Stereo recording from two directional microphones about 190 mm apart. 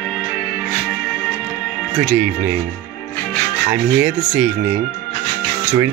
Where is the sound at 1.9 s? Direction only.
10° right (ahead or behind).